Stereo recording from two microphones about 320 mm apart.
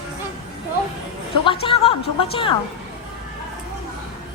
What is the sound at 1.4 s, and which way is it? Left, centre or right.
Music, centre.